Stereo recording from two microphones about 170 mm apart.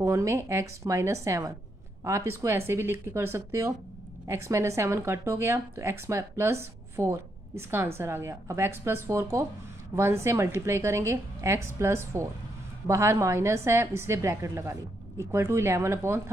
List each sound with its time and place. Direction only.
0.0 s speech: 15° right (ahead or behind)